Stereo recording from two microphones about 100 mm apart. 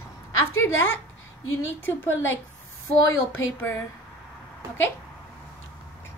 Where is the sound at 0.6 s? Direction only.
20° left (ahead or behind).